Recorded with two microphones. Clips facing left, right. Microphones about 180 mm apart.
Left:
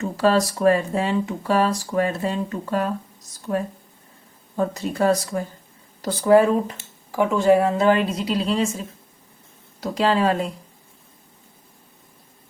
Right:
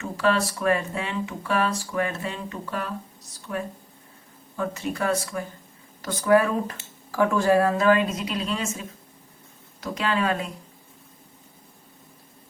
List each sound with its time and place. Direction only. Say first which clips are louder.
0.0 s speech: left 4 dB; 35° left (ahead or behind)
4.5 s speech: left 5 dB; 35° left (ahead or behind)
9.8 s speech: left 6 dB; 30° left (ahead or behind)